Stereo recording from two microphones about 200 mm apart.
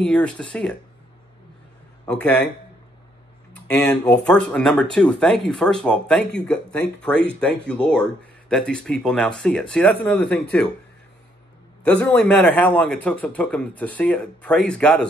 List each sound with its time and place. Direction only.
0.0 s speech: 5° left (ahead or behind)
2.0 s a man's voice: 5° left (ahead or behind)
3.7 s a man's voice: 5° left (ahead or behind)
11.8 s a man's voice: 5° left (ahead or behind)